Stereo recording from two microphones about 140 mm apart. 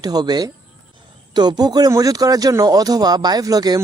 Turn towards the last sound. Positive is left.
turn(degrees=-25)  # may be behind; listen again after turning